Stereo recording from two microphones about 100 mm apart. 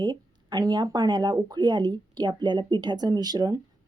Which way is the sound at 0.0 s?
45° right (ahead or behind).